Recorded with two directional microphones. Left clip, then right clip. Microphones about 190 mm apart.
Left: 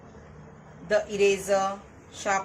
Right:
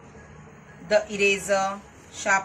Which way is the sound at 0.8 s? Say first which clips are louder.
Right 2 dB; 25° left (ahead or behind).